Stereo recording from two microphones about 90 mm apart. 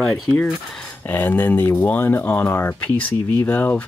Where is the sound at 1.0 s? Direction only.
20° left (ahead or behind).